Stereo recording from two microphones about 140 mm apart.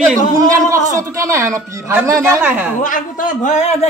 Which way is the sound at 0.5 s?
25° right (ahead or behind).